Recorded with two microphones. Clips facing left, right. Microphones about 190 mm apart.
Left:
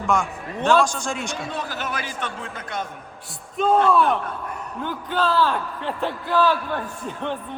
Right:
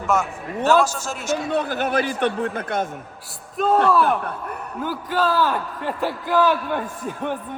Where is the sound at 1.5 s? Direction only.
55° right (ahead or behind).